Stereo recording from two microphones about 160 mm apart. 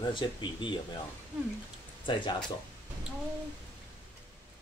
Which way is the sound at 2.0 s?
30° left (ahead or behind).